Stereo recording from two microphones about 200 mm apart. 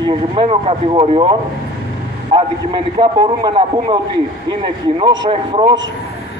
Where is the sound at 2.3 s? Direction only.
20° right (ahead or behind).